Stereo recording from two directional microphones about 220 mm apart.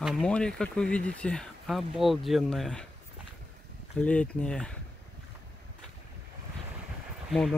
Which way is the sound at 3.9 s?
5° left (ahead or behind).